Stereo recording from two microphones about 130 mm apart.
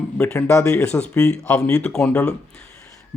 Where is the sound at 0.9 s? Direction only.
5° left (ahead or behind).